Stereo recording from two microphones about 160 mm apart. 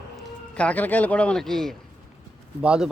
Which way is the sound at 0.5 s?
10° left (ahead or behind).